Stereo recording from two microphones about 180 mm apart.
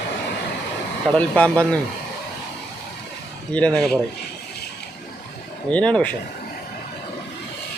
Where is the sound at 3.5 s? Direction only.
5° left (ahead or behind).